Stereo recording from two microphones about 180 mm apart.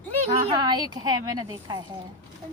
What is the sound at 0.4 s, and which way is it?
Speech, 25° right (ahead or behind).